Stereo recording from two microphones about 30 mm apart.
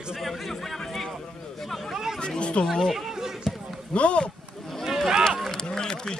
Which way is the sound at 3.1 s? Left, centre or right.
Centre.